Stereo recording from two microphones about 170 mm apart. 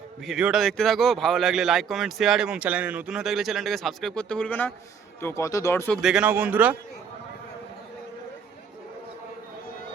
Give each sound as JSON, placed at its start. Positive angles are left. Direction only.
{"t": 0.2, "sound": "a man's voice", "side_deg": -5}
{"t": 6.0, "sound": "speech", "side_deg": -5}